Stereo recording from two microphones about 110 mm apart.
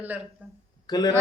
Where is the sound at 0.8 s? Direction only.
40° left (ahead or behind).